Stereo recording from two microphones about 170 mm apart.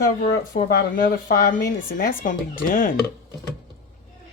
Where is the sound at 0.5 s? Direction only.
55° left (ahead or behind).